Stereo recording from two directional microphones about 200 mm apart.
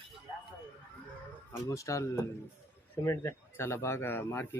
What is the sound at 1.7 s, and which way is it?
Speech, 15° left (ahead or behind).